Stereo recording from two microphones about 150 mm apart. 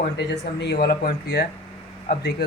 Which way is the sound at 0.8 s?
90° left.